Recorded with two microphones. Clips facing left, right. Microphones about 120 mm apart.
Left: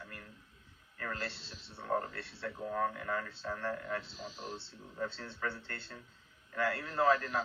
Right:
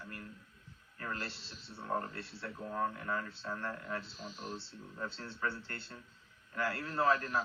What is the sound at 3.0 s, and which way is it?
Speech, 30° left (ahead or behind).